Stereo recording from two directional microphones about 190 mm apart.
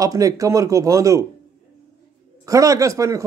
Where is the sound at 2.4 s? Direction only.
15° right (ahead or behind).